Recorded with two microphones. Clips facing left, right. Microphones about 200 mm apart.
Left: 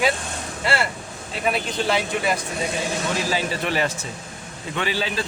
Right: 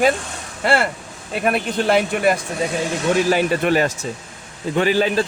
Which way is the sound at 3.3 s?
55° right (ahead or behind).